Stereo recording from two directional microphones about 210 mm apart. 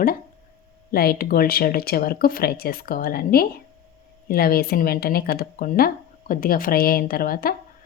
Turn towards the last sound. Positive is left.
turn(degrees=45)  # may be behind; listen again after turning